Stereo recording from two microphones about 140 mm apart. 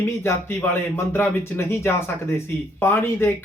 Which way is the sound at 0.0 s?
15° left (ahead or behind).